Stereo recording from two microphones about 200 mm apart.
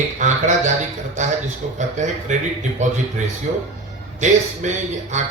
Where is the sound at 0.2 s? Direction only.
35° right (ahead or behind).